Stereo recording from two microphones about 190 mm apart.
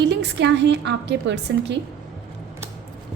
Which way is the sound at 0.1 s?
65° right (ahead or behind).